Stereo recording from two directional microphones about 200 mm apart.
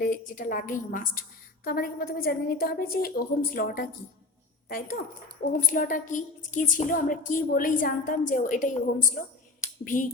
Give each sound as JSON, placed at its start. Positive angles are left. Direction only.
{"t": 0.0, "sound": "a woman's voice", "side_deg": 40}
{"t": 5.5, "sound": "a woman's voice", "side_deg": 40}